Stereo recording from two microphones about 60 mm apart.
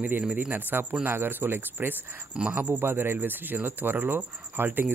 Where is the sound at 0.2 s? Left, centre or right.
Right.